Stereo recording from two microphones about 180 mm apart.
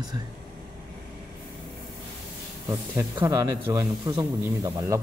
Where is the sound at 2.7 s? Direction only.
20° right (ahead or behind).